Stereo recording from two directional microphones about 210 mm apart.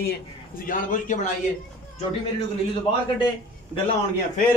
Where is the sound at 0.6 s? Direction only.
40° left (ahead or behind).